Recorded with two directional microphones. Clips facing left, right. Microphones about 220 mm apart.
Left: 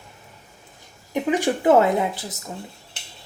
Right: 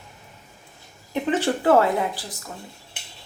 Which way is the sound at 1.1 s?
15° left (ahead or behind).